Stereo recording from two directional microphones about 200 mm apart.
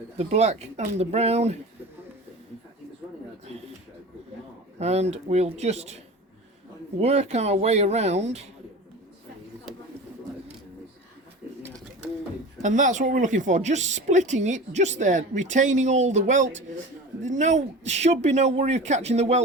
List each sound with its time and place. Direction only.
0.2 s speech: 35° right (ahead or behind)
4.8 s speech: 35° right (ahead or behind)
7.0 s speech: 30° right (ahead or behind)
12.6 s speech: 40° right (ahead or behind)